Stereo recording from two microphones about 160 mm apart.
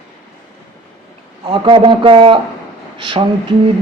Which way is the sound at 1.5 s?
30° right (ahead or behind).